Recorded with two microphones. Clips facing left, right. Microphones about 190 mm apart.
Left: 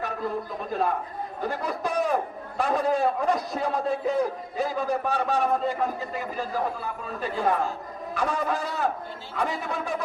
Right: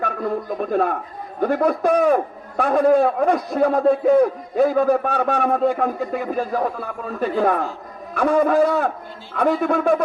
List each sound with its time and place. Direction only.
0.0 s a man's voice: 55° right (ahead or behind)